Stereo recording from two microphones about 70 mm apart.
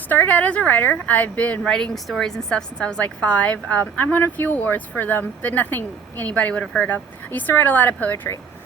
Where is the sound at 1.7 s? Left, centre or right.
Centre.